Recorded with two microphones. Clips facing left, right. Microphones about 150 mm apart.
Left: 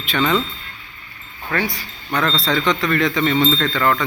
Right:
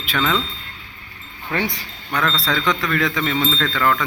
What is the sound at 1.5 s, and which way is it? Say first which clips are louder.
Speech: left 1 dB; 20° right (ahead or behind).